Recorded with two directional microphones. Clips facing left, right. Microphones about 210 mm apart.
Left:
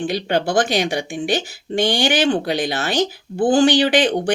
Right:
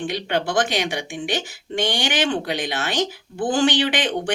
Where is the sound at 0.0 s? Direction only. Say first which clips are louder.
Left 4 dB; 35° left (ahead or behind).